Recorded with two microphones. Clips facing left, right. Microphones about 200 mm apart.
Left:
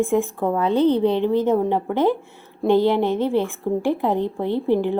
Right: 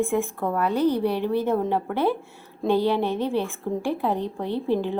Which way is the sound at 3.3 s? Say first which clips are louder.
Left 5 dB; 15° left (ahead or behind).